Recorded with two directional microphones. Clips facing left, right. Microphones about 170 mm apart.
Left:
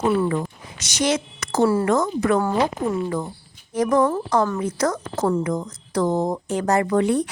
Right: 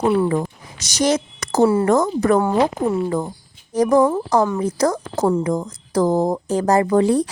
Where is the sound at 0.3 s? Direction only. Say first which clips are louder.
Right 4 dB; 40° right (ahead or behind).